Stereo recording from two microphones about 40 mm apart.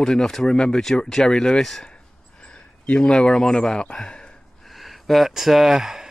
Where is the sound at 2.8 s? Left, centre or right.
Left.